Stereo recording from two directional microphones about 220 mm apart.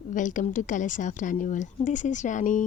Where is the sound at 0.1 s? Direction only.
35° left (ahead or behind).